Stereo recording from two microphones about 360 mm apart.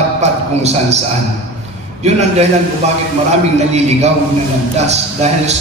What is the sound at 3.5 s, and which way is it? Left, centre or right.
A man's voice, centre.